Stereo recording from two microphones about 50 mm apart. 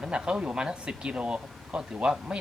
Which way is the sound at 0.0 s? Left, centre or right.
Centre.